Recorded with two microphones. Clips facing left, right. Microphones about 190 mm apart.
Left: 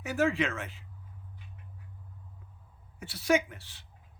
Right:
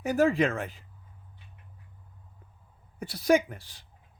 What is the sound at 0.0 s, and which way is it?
Speech, 40° right (ahead or behind).